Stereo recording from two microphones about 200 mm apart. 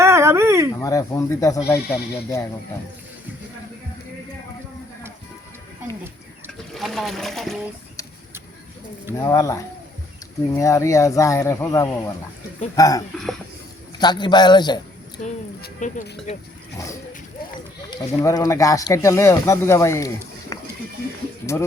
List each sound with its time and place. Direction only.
0.0 s a sound: 15° right (ahead or behind)
0.7 s speech: 15° left (ahead or behind)
6.7 s speech: centre (ahead or behind)
9.1 s a man's voice: 15° left (ahead or behind)
15.8 s speech: 40° left (ahead or behind)
17.9 s speech: 15° left (ahead or behind)
20.5 s a sound: 15° left (ahead or behind)